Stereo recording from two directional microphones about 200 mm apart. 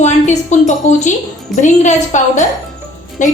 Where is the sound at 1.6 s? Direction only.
35° left (ahead or behind).